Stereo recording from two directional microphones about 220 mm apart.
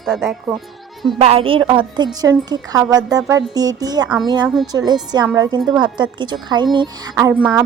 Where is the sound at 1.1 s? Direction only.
25° right (ahead or behind).